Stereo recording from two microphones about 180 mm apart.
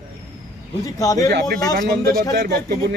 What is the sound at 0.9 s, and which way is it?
Speech, 20° left (ahead or behind).